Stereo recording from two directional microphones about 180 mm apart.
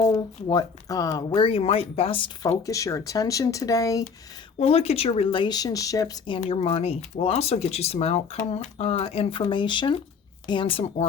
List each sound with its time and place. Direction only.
0.0 s speech: 20° left (ahead or behind)
1.3 s speech: 30° left (ahead or behind)
4.6 s speech: 35° left (ahead or behind)